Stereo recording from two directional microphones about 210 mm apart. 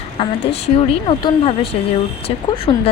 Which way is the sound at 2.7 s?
25° left (ahead or behind).